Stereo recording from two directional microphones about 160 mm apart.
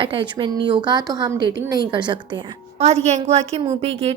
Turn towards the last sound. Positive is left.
turn(degrees=-40)  # may be behind; listen again after turning